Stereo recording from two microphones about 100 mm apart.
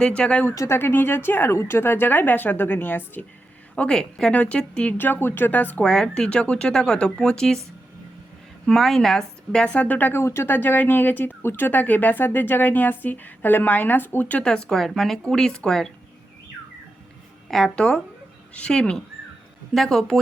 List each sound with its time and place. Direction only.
0.0 s speech: 10° left (ahead or behind)
0.4 s a woman's voice: 30° left (ahead or behind)
3.8 s speech: 10° left (ahead or behind)
8.6 s speech: 5° left (ahead or behind)
17.5 s speech: 5° left (ahead or behind)